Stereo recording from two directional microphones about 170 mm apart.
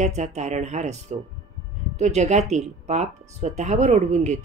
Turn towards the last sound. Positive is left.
turn(degrees=-45)  # may be behind; listen again after turning